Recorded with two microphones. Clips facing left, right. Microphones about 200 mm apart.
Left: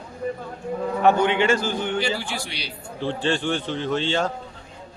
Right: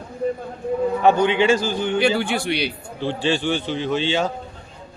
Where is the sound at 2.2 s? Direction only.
60° right (ahead or behind).